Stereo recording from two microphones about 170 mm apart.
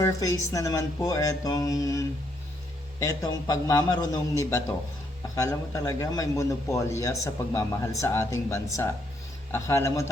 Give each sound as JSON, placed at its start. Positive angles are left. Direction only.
{"t": 0.0, "sound": "a man's voice", "side_deg": 20}